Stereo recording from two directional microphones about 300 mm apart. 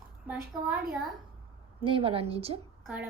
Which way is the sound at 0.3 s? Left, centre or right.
Centre.